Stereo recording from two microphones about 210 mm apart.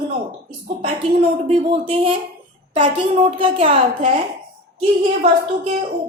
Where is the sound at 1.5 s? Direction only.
25° right (ahead or behind).